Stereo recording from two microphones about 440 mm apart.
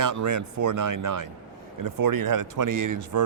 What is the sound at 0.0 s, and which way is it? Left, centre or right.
Speech, right.